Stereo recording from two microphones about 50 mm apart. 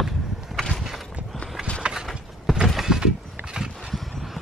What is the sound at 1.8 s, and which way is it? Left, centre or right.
Mechanisms, centre.